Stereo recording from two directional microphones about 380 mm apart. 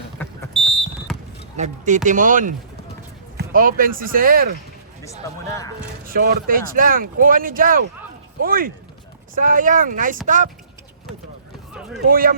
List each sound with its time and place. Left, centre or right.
0.2 s a sound: centre
1.5 s speech: centre
6.1 s speech: right
11.7 s run: centre
12.0 s speech: right